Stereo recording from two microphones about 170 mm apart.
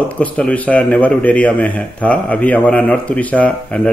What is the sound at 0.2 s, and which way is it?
A man's voice, 10° left (ahead or behind).